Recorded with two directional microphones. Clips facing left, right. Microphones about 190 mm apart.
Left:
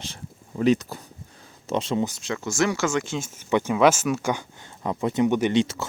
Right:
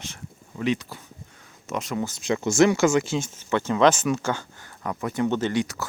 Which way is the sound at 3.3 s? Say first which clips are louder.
Left 4 dB; 10° left (ahead or behind).